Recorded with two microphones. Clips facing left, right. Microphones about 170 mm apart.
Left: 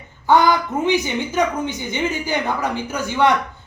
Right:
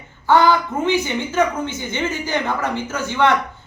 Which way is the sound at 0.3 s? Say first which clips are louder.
Even; 15° left (ahead or behind).